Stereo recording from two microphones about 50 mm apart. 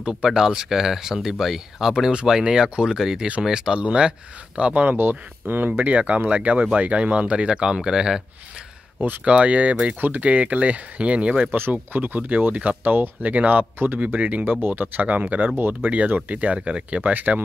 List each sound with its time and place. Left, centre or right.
0.0 s speech: centre
5.4 s speech: right
5.9 s speech: right; by 8.2 s centre
9.2 s speech: right
11.7 s speech: right
15.5 s speech: right
16.2 s speech: right
17.1 s speech: right